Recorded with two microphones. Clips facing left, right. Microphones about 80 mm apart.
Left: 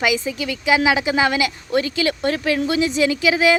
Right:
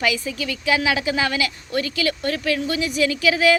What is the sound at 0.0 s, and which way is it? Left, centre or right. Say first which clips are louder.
Speech: left 3 dB; centre.